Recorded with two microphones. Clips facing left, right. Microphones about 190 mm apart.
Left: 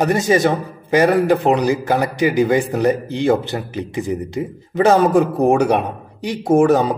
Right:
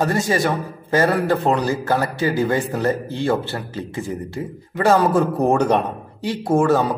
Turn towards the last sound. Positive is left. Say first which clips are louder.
# left 4 dB
turn(degrees=20)  # may be behind; listen again after turning